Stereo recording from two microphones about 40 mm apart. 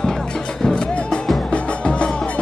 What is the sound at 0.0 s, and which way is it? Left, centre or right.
Music, centre.